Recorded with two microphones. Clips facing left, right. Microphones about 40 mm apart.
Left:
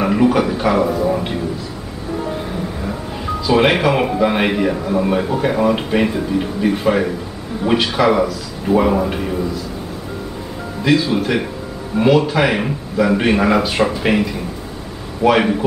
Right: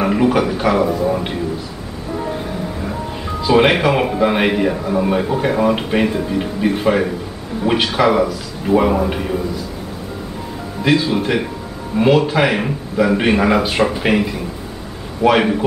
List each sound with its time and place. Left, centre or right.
0.0 s a man's voice: centre
3.4 s a man's voice: centre
10.8 s a man's voice: centre